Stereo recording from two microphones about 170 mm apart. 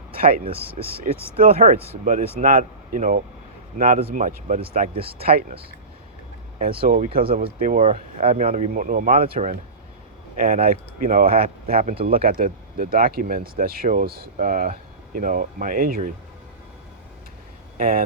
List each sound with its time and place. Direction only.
0.2 s speech: 60° right (ahead or behind)
4.9 s speech: 30° right (ahead or behind)
5.2 s speech: 60° right (ahead or behind)
6.8 s speech: 55° right (ahead or behind)
7.8 s speech: 35° right (ahead or behind)
8.4 s speech: 45° right (ahead or behind)
10.3 s speech: 55° right (ahead or behind)
17.7 s speech: 55° right (ahead or behind)